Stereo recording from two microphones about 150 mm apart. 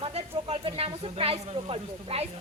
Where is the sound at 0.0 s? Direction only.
45° right (ahead or behind).